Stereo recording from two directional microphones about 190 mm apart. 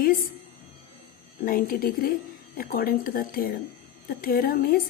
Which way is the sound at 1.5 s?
45° left (ahead or behind).